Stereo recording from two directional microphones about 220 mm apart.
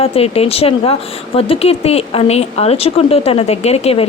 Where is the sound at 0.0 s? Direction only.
25° left (ahead or behind).